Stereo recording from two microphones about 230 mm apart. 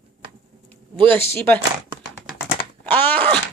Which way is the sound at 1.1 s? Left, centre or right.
Centre.